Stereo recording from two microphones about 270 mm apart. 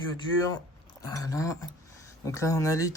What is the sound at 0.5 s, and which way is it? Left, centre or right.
Speech, centre.